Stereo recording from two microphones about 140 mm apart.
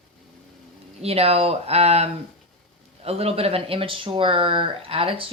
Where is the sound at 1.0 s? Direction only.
45° right (ahead or behind).